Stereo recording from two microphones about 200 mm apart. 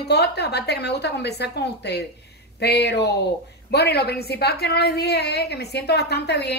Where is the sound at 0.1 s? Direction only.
55° left (ahead or behind).